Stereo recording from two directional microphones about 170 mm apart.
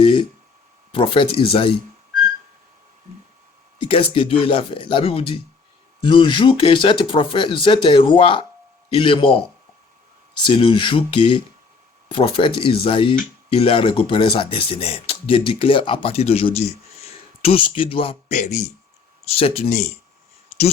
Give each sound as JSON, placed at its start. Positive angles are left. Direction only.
{"t": 0.0, "sound": "a sound", "side_deg": 30}
{"t": 0.9, "sound": "speech", "side_deg": 30}
{"t": 3.8, "sound": "speech", "side_deg": 30}
{"t": 10.4, "sound": "speech", "side_deg": 30}